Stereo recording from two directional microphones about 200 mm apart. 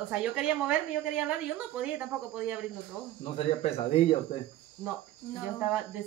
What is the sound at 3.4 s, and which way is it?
Speech, 30° left (ahead or behind).